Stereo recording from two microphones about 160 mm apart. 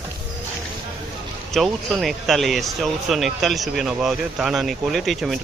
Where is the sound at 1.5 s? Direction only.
Centre (ahead or behind).